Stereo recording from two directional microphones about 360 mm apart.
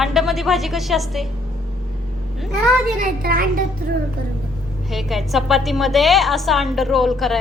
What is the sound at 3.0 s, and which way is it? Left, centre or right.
Speech, right.